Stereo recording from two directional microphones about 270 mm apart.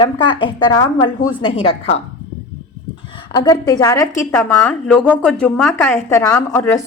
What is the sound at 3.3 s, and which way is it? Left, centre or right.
A woman's voice, centre.